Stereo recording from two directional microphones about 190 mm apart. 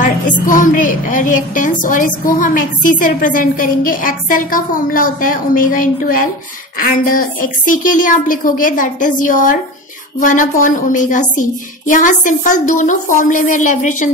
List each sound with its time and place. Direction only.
0.0 s a woman's voice: 45° left (ahead or behind)